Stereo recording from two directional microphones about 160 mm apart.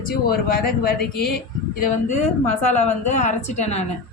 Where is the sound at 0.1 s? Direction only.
65° left (ahead or behind).